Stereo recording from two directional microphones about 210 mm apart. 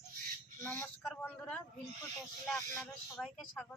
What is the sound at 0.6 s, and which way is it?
A woman's voice, 10° left (ahead or behind).